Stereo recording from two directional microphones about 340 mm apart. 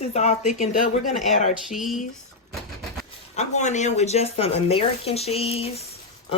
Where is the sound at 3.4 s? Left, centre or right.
Left.